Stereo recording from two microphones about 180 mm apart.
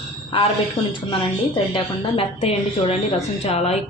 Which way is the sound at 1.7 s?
30° left (ahead or behind).